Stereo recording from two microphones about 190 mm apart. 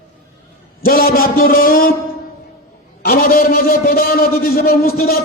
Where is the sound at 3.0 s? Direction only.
50° left (ahead or behind).